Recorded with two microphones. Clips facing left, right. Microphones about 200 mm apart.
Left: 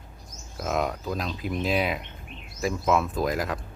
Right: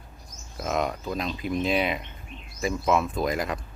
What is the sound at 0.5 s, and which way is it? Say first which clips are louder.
Speech: even; centre (ahead or behind).